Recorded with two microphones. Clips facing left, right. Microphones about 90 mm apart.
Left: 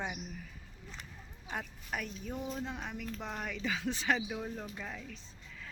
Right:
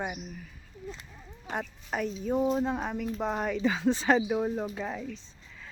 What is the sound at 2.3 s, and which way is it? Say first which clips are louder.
Speech: right 14 dB; 45° right (ahead or behind).